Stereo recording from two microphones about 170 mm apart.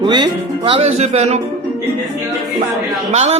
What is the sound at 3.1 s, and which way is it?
Speech, 40° right (ahead or behind).